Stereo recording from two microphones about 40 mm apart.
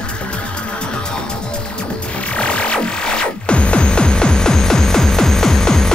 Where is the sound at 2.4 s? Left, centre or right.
Left.